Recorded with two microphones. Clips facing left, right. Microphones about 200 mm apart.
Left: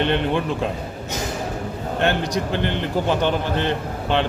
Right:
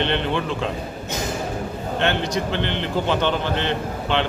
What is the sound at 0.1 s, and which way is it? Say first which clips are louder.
Speech: left 2 dB; 10° left (ahead or behind).